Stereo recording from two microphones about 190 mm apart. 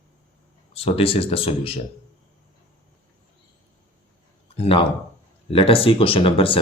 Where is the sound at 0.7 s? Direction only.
30° left (ahead or behind).